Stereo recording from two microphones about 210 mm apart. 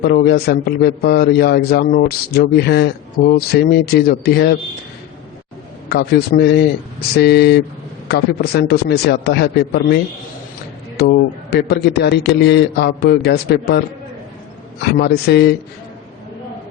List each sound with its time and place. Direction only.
0.0 s a man's voice: 50° left (ahead or behind)
5.9 s a man's voice: 50° left (ahead or behind)
11.5 s a man's voice: 50° left (ahead or behind)